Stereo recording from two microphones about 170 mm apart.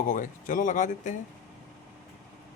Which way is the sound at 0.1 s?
50° left (ahead or behind).